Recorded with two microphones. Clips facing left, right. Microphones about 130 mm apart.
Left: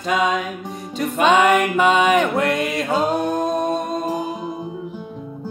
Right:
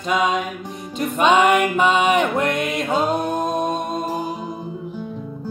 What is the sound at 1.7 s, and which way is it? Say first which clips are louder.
Mantra: left 1 dB; 40° left (ahead or behind).